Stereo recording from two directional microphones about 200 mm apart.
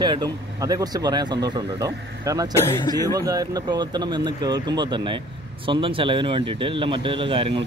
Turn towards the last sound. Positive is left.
turn(degrees=-25)  # may be behind; listen again after turning